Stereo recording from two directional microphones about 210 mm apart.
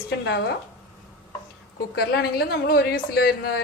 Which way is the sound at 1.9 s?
50° left (ahead or behind).